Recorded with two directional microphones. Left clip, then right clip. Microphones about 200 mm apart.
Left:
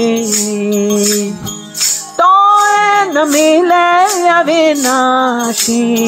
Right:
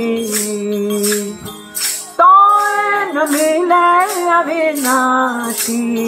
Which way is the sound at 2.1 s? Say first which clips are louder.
Even; 30° left (ahead or behind).